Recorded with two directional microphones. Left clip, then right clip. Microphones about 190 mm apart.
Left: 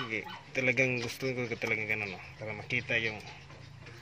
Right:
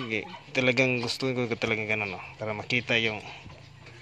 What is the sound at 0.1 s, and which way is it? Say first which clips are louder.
Speech: right 5 dB; 20° right (ahead or behind).